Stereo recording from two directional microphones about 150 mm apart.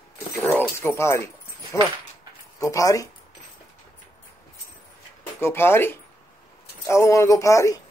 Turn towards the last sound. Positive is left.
turn(degrees=20)  # may be behind; listen again after turning